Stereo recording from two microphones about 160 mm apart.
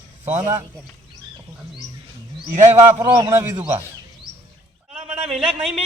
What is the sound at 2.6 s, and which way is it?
A man's voice, 20° right (ahead or behind).